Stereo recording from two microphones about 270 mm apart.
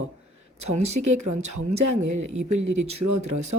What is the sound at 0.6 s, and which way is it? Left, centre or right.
Speech, right.